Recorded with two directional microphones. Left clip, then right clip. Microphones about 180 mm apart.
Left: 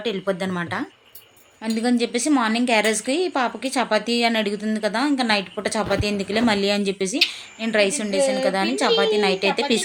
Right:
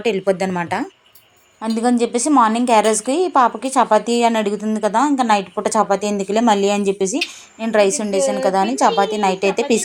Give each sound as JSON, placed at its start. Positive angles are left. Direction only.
{"t": 0.0, "sound": "a woman's voice", "side_deg": -20}